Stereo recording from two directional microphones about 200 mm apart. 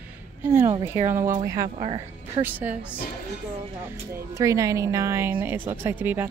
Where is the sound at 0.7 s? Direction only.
15° right (ahead or behind).